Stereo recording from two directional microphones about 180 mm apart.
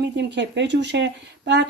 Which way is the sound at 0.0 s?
75° right (ahead or behind).